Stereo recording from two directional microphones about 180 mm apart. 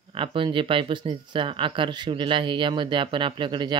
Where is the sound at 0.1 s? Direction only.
30° right (ahead or behind).